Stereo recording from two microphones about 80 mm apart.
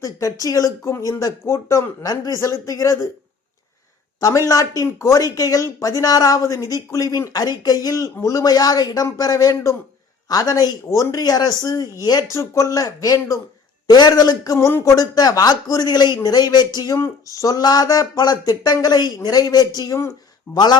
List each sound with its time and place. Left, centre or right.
0.0 s speech: left
4.2 s speech: left
13.8 s a man's voice: left
20.0 s speech: left